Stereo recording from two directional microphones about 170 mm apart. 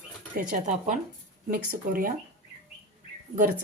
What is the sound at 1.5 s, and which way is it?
Speech, 55° right (ahead or behind).